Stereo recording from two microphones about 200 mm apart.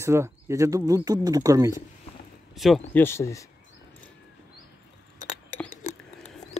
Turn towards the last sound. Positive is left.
turn(degrees=40)  # may be behind; listen again after turning